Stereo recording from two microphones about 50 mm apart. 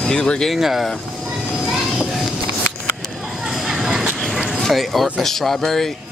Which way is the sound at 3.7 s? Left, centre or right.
Centre.